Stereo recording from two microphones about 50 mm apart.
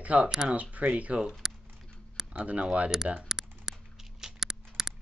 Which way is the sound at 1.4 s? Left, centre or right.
Centre.